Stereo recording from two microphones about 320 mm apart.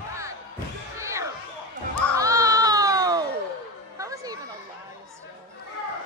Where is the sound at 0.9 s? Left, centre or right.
Centre.